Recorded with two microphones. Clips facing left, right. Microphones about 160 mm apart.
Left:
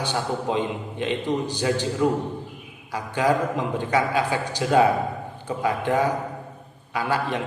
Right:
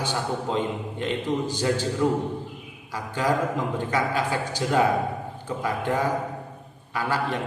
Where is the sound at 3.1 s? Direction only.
20° left (ahead or behind).